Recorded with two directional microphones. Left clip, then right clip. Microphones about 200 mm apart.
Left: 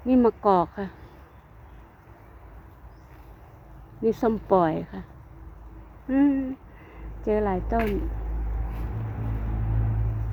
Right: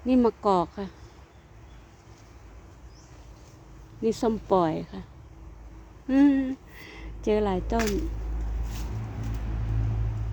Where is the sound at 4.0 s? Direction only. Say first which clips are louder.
Left 2 dB; 5° right (ahead or behind).